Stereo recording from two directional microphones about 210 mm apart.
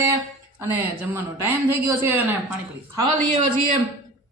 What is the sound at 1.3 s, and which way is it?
Speech, 10° right (ahead or behind).